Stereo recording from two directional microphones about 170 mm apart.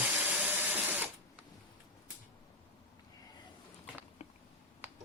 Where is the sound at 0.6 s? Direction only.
10° right (ahead or behind).